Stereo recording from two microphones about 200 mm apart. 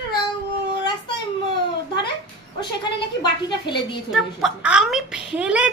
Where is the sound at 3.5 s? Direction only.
25° left (ahead or behind).